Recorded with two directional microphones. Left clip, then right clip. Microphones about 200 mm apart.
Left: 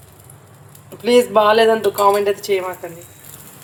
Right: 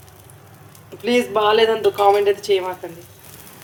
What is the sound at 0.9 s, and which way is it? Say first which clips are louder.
Speech: left 5 dB; 15° left (ahead or behind).